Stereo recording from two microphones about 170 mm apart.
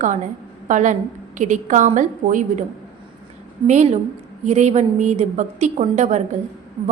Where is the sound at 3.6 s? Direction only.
45° right (ahead or behind).